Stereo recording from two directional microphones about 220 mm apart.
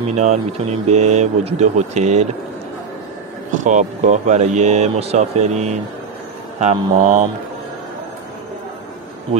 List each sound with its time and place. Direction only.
0.0 s speech: 30° right (ahead or behind)
3.6 s speech: 35° right (ahead or behind)
9.3 s speech: 25° right (ahead or behind)